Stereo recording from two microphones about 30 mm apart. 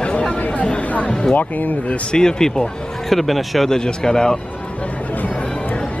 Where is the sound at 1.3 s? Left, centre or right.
Left.